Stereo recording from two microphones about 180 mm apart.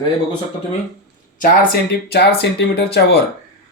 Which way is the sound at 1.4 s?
60° left (ahead or behind).